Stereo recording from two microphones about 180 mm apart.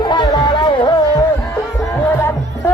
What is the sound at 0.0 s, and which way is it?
Music, 25° left (ahead or behind).